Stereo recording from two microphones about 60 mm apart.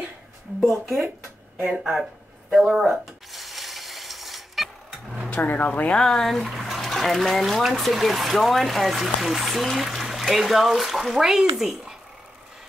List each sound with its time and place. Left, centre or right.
0.8 s speech: right
1.6 s speech: centre
2.8 s dishes: centre
5.3 s speech: left
5.9 s speech: centre